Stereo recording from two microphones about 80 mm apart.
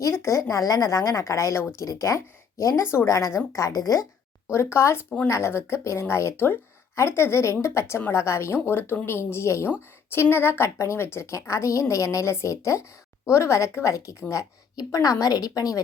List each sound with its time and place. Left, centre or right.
0.0 s a woman's voice: left
4.5 s a woman's voice: left